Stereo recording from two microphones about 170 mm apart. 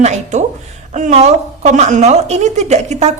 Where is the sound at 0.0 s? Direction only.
40° right (ahead or behind).